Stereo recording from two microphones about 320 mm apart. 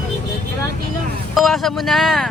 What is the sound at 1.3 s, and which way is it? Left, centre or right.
Speech, centre.